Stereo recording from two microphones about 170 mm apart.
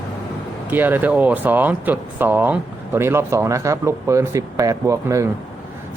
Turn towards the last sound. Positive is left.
turn(degrees=-20)  # may be behind; listen again after turning